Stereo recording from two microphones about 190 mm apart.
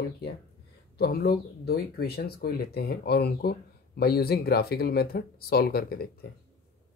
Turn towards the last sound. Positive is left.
turn(degrees=55)  # may be behind; listen again after turning